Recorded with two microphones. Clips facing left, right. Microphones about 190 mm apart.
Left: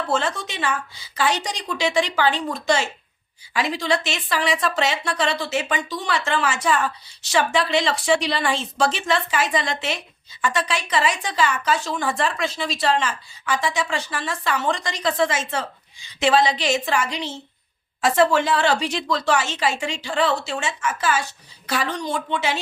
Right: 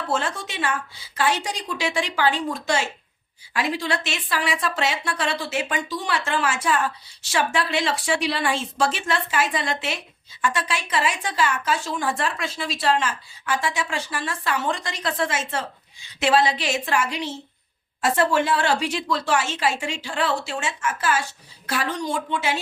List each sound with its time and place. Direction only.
0.1 s a woman's voice: 5° right (ahead or behind)